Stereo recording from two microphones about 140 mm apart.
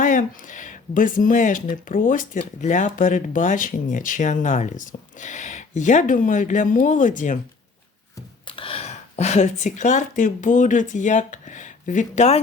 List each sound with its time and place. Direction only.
0.0 s speech: 65° left (ahead or behind)
2.6 s speech: 60° left (ahead or behind)
8.4 s speech: 40° left (ahead or behind)